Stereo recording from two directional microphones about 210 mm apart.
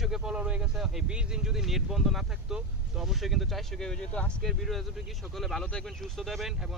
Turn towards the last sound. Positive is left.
turn(degrees=0)  # may be behind; listen again after turning